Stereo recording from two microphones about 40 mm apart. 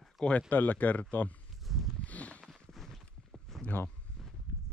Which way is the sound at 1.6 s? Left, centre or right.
Centre.